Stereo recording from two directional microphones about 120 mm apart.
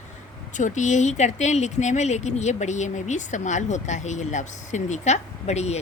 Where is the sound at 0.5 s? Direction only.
90° left.